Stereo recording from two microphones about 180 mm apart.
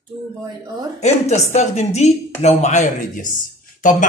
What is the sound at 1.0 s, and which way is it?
A woman's voice, 40° left (ahead or behind).